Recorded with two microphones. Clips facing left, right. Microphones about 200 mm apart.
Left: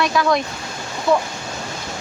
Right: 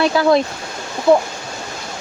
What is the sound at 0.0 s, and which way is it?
Speech, 30° right (ahead or behind).